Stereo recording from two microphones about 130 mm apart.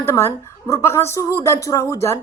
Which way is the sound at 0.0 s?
20° left (ahead or behind).